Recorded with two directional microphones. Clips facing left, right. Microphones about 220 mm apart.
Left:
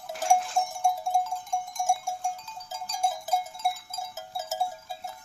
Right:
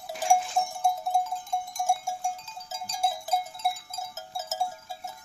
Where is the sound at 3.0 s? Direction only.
Centre (ahead or behind).